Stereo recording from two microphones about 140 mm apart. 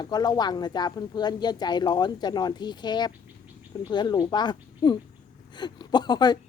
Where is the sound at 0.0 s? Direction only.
30° left (ahead or behind).